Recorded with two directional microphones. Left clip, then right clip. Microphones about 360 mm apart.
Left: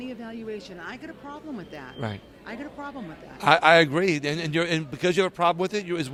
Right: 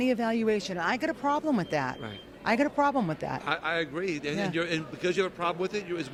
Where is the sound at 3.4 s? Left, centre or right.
Left.